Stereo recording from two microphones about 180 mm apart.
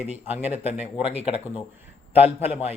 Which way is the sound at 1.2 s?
35° left (ahead or behind).